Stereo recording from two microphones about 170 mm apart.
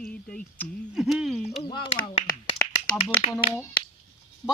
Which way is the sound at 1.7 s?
25° left (ahead or behind).